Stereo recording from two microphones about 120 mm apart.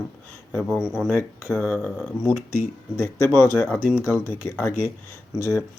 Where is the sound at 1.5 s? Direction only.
10° left (ahead or behind).